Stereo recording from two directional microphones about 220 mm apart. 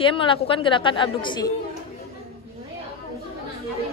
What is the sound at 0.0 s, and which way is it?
A woman's voice, 25° left (ahead or behind).